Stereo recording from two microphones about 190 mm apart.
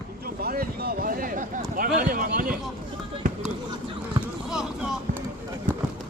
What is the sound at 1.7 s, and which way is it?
Speech, 50° right (ahead or behind).